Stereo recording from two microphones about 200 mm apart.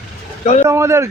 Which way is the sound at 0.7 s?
15° right (ahead or behind).